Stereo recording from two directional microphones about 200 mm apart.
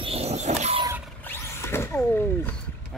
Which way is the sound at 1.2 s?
10° left (ahead or behind).